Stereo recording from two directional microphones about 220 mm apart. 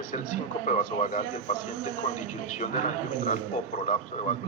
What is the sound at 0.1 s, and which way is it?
A man's voice, 35° left (ahead or behind).